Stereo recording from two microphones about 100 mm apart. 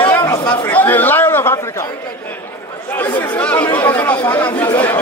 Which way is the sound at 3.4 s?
15° left (ahead or behind).